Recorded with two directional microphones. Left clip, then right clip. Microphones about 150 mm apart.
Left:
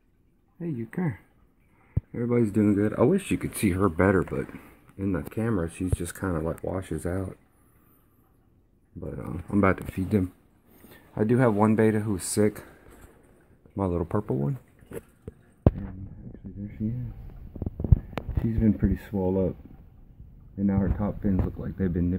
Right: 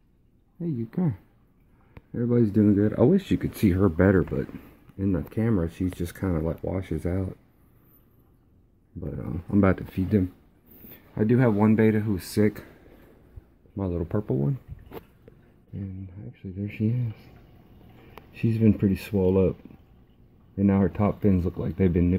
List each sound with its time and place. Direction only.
0.6 s speech: 5° right (ahead or behind)
2.1 s speech: centre (ahead or behind)
9.0 s speech: centre (ahead or behind)
9.9 s speech: 20° left (ahead or behind)
11.1 s speech: 5° left (ahead or behind)
13.7 s speech: 25° left (ahead or behind)
18.6 s speech: 35° right (ahead or behind)
20.5 s speech: 35° right (ahead or behind)
21.5 s speech: 20° right (ahead or behind)